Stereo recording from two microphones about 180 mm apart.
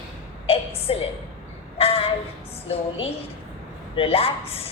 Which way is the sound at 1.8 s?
30° left (ahead or behind).